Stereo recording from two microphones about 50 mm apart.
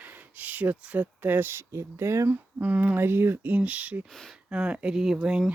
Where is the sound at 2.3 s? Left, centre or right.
Right.